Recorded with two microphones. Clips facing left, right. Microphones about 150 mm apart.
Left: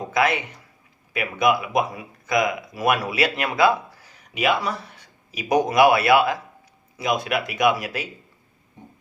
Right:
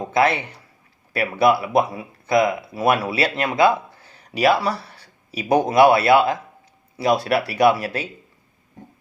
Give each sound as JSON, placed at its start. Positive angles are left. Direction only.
{"t": 0.0, "sound": "a man's voice", "side_deg": -30}